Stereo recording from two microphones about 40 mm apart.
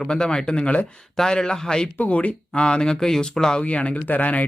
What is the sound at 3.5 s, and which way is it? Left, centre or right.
Speech, left.